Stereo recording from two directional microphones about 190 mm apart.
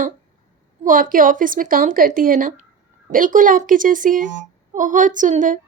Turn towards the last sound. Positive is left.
turn(degrees=-40)  # may be behind; listen again after turning